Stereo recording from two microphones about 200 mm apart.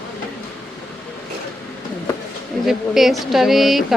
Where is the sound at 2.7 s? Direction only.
Centre (ahead or behind).